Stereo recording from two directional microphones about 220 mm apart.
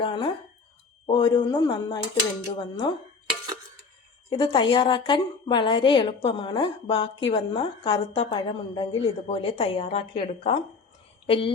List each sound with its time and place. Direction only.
0.0 s a woman's voice: 20° left (ahead or behind)
4.3 s a woman's voice: 20° left (ahead or behind)